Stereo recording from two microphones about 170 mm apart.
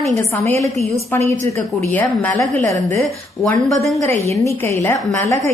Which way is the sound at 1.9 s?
10° left (ahead or behind).